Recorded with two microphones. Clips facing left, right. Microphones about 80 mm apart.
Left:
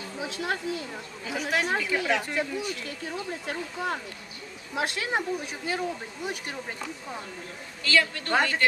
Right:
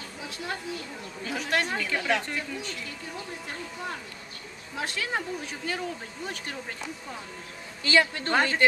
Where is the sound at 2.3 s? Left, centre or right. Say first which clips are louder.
Left 4 dB; centre.